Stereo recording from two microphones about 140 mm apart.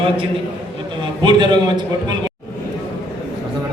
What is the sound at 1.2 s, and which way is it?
Speech, 30° right (ahead or behind).